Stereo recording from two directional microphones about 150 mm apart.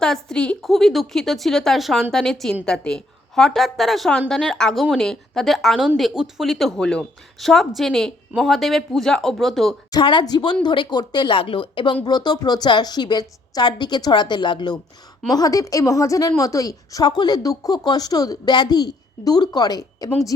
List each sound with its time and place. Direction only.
0.0 s speech: 5° left (ahead or behind)
9.9 s a woman's voice: 30° left (ahead or behind)